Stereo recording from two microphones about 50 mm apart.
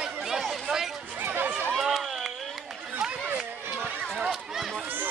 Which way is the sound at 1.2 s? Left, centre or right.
Right.